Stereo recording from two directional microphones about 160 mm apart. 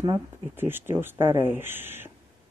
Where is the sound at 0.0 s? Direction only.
20° right (ahead or behind).